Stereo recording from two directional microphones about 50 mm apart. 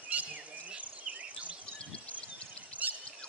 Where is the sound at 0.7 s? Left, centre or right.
Right.